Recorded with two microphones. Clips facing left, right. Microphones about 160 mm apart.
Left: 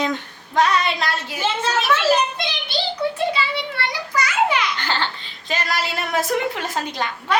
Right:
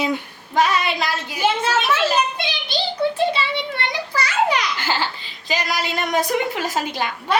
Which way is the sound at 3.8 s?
25° right (ahead or behind).